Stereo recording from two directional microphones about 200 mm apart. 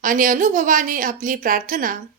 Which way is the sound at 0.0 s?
45° right (ahead or behind).